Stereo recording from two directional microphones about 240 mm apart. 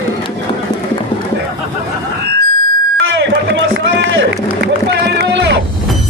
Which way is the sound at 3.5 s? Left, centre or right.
Right.